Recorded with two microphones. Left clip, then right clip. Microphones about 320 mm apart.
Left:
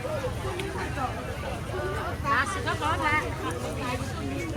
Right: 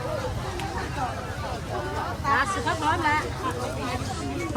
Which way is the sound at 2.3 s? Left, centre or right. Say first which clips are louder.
Right 3 dB; right.